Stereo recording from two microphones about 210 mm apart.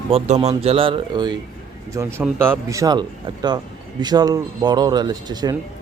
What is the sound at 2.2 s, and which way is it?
Speech, 10° right (ahead or behind).